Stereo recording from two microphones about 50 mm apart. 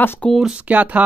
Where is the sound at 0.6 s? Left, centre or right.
Right.